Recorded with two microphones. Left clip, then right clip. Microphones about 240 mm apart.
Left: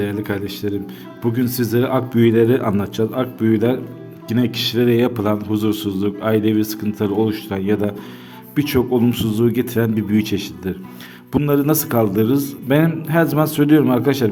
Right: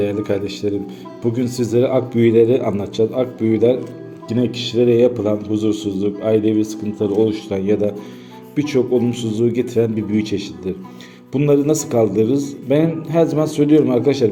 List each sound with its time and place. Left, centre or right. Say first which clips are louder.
0.6 s speech: right 2 dB; left
1.2 s a man's voice: even; left
3.0 s speech: right 4 dB; left
3.5 s a man's voice: right 5 dB; centre
9.7 s speech: right 2 dB; left
10.2 s a man's voice: even; left